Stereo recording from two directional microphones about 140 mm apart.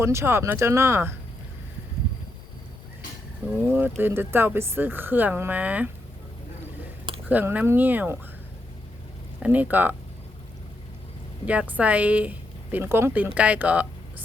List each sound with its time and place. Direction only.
0.0 s speech: 20° right (ahead or behind)
3.7 s speech: 15° right (ahead or behind)
7.3 s speech: 10° right (ahead or behind)
9.4 s speech: 10° right (ahead or behind)
11.4 s speech: 10° right (ahead or behind)